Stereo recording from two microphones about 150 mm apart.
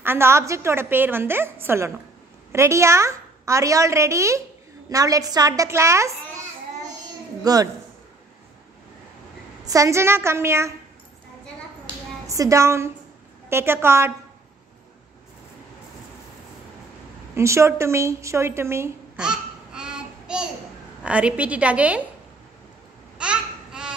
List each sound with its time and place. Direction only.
0.0 s a woman's voice: 15° right (ahead or behind)
7.4 s a woman's voice: 25° right (ahead or behind)
9.7 s a woman's voice: 20° right (ahead or behind)
12.3 s a woman's voice: 20° right (ahead or behind)
17.4 s a woman's voice: 20° right (ahead or behind)
19.1 s babbling: 5° right (ahead or behind)
21.0 s a woman's voice: 10° right (ahead or behind)
23.1 s babbling: 5° right (ahead or behind)